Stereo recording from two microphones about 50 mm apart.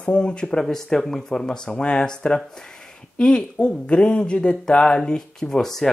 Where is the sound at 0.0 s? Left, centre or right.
Left.